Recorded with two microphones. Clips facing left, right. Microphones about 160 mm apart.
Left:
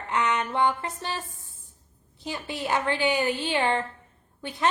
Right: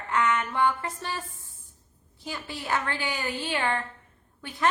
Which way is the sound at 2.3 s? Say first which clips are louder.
Left 3 dB; 20° left (ahead or behind).